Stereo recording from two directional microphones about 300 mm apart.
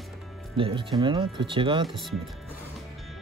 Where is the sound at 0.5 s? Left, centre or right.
Centre.